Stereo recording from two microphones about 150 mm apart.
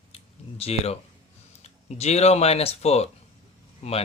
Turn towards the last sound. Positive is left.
turn(degrees=40)  # may be behind; listen again after turning